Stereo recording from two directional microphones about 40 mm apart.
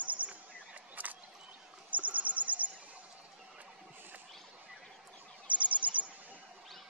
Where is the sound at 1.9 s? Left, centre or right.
Right.